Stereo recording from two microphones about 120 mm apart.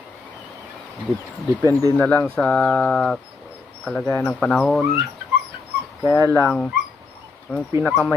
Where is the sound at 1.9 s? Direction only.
15° left (ahead or behind).